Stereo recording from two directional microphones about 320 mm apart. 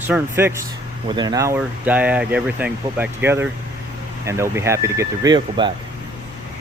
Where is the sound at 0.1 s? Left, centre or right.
Centre.